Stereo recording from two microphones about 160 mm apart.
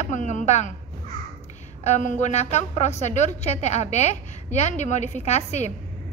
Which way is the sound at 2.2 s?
45° left (ahead or behind).